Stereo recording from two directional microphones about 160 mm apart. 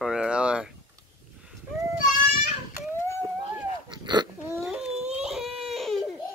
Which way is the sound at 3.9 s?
25° right (ahead or behind).